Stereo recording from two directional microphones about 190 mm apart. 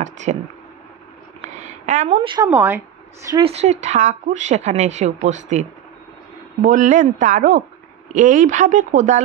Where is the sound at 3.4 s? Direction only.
35° right (ahead or behind).